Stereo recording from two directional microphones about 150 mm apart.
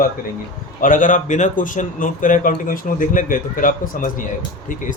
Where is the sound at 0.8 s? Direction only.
60° left (ahead or behind).